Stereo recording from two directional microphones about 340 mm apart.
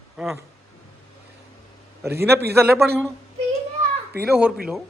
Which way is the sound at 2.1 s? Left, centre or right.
Centre.